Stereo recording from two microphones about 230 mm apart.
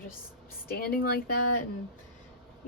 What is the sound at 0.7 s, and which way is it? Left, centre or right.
Speech, left.